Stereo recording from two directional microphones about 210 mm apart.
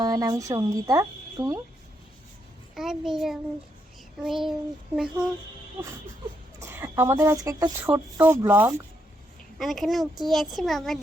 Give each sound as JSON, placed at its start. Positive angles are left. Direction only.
{"t": 0.0, "sound": "speech", "side_deg": -15}
{"t": 2.7, "sound": "a child's voice", "side_deg": 0}
{"t": 6.6, "sound": "a child's voice", "side_deg": -15}